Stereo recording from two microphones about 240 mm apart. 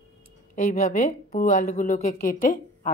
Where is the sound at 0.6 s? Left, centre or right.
Left.